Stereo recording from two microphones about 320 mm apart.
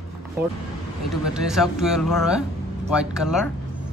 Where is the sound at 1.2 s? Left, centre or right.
Centre.